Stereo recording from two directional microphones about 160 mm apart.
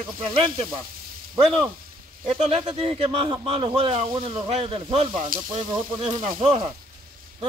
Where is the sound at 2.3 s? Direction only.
40° right (ahead or behind).